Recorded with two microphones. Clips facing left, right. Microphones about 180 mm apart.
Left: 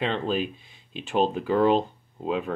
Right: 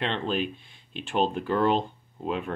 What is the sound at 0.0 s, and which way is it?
Speech, 5° left (ahead or behind).